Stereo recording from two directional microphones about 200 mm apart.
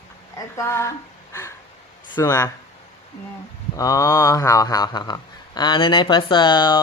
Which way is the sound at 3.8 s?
15° left (ahead or behind).